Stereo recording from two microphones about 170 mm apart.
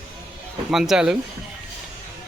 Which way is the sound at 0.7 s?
Centre (ahead or behind).